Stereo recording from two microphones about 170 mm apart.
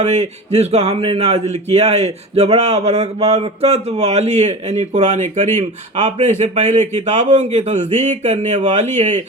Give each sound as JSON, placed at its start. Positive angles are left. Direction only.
{"t": 0.0, "sound": "speech", "side_deg": -40}